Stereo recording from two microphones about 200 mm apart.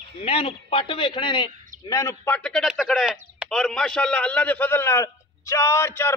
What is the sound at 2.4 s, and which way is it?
A man's voice, centre (ahead or behind).